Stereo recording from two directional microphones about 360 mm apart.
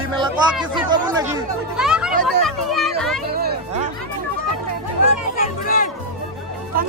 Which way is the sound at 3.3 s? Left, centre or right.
Right.